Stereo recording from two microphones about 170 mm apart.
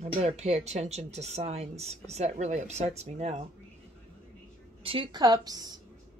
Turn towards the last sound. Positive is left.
turn(degrees=-20)  # may be behind; listen again after turning